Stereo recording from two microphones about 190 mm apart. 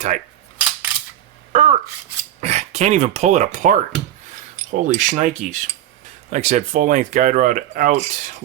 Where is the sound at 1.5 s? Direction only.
40° right (ahead or behind).